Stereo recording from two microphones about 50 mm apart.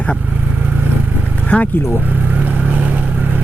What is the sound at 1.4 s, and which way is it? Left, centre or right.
Speech, left.